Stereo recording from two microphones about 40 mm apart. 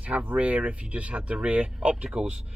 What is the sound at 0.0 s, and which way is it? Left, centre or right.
Speech, right.